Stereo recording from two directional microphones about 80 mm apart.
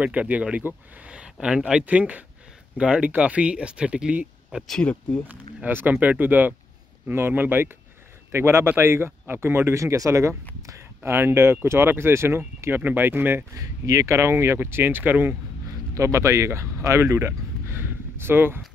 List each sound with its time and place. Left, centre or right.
0.0 s speech: centre
4.6 s speech: centre
5.3 s speech: right
11.0 s speech: right
13.6 s speech: right
15.9 s speech: right